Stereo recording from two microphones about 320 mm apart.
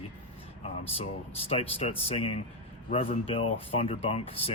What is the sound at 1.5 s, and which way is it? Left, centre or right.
Speech, centre.